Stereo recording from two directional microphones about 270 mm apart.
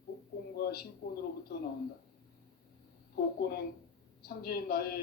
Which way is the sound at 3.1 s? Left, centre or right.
Left.